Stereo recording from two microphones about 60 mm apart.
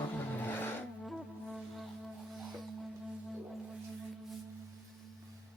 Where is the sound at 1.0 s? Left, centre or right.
Centre.